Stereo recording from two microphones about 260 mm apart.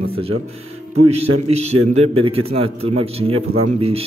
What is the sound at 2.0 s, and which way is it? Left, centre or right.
Speech, right.